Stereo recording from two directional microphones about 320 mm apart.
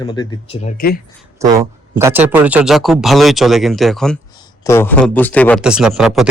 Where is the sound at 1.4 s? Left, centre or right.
Centre.